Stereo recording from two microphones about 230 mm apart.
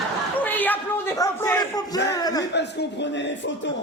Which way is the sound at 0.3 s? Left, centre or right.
Centre.